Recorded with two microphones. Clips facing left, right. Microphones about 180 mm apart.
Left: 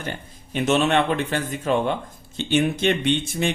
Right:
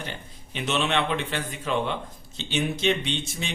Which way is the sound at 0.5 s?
45° left (ahead or behind).